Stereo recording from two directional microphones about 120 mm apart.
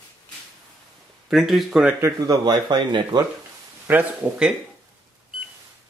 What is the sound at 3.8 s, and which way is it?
Speech, 15° right (ahead or behind).